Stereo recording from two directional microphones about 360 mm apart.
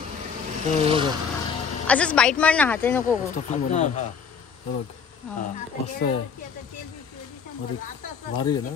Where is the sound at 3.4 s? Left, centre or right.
Centre.